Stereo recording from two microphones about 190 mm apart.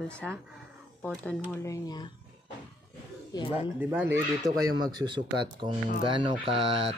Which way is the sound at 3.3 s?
25° left (ahead or behind).